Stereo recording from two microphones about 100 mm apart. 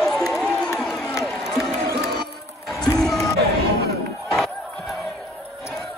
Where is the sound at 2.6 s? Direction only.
5° left (ahead or behind).